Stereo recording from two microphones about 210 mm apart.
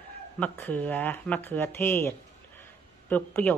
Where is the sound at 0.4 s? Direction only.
10° left (ahead or behind).